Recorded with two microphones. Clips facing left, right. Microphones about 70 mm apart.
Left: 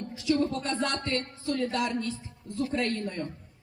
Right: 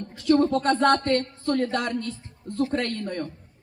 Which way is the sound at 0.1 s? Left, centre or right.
Right.